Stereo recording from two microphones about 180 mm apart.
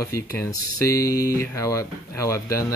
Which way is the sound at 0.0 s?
15° left (ahead or behind).